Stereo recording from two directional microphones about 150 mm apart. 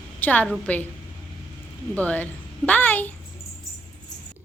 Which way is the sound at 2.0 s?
10° left (ahead or behind).